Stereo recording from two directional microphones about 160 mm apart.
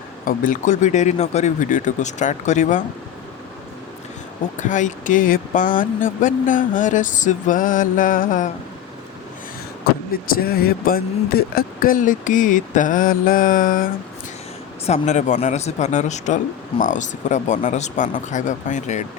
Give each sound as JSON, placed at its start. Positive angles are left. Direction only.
{"t": 0.3, "sound": "speech", "side_deg": 55}
{"t": 4.5, "sound": "speech", "side_deg": 50}
{"t": 10.1, "sound": "speech", "side_deg": 70}
{"t": 14.8, "sound": "speech", "side_deg": 45}